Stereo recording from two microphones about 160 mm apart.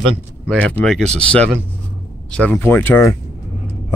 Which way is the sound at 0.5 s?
5° left (ahead or behind).